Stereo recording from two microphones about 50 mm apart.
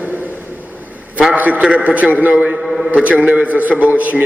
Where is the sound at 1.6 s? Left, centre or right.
Right.